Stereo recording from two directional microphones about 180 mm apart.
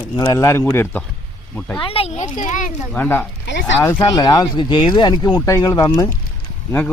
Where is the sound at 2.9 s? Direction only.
10° left (ahead or behind).